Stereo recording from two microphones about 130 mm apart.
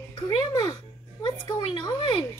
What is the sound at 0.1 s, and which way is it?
Music, 30° left (ahead or behind).